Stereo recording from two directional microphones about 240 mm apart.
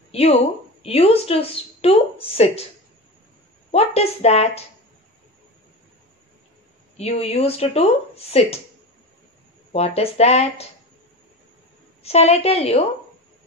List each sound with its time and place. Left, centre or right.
0.1 s a woman's voice: left
3.7 s speech: left
7.0 s speech: left
9.7 s speech: left
12.0 s speech: left